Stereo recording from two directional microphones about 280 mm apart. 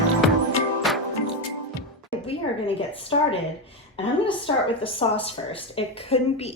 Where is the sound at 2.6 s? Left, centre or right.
Centre.